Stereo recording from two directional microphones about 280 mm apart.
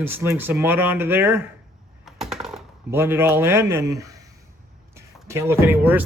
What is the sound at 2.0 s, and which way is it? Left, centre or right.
Typing, centre.